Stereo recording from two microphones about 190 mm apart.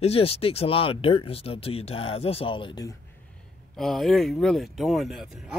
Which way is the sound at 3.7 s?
Centre (ahead or behind).